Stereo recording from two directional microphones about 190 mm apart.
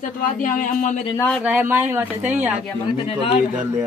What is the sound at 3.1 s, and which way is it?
Speech, 30° left (ahead or behind).